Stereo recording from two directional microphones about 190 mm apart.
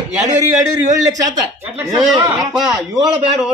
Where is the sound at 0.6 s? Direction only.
20° right (ahead or behind).